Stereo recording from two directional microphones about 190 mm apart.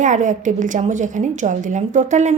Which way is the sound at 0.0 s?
40° right (ahead or behind).